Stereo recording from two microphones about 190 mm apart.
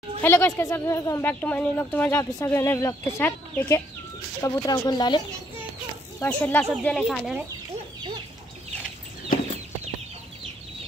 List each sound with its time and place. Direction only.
0.2 s speech: 10° left (ahead or behind)
6.1 s speech: 10° left (ahead or behind)